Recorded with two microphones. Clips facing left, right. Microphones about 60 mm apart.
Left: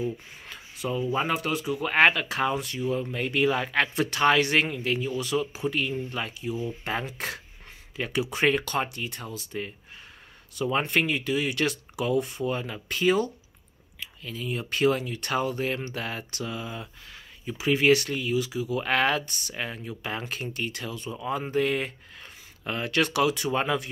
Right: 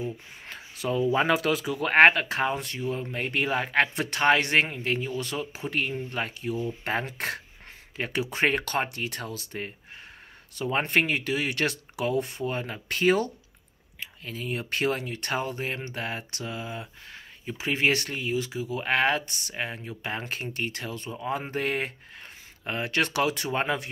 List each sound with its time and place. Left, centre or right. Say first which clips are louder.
0.7 s speech: right 3 dB; right
1.9 s speech: right 3 dB; right
9.0 s speech: right 2 dB; right
10.5 s speech: even; right
22.7 s speech: left 1 dB; right